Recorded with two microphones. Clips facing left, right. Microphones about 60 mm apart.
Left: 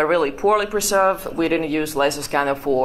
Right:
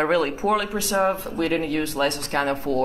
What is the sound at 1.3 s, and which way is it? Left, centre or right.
Speech, left.